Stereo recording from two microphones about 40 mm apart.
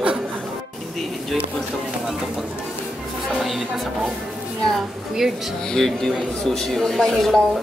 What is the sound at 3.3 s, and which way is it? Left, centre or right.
Music, centre.